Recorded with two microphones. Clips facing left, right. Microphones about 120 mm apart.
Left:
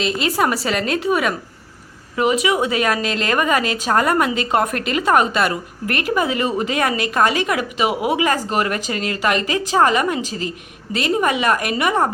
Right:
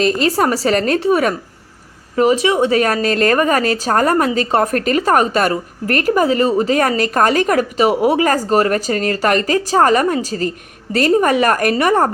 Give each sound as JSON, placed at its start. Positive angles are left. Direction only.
{"t": 0.0, "sound": "a woman's voice", "side_deg": -40}